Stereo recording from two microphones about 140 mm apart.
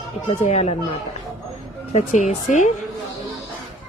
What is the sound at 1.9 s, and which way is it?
Speech, 55° left (ahead or behind).